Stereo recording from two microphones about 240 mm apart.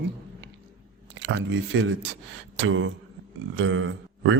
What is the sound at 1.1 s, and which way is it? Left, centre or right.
Speech, right.